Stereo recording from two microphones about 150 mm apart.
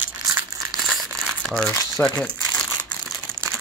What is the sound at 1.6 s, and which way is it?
Crumpling, 20° left (ahead or behind).